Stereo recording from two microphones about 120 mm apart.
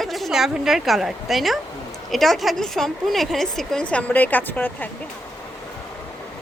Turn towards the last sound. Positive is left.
turn(degrees=15)  # may be behind; listen again after turning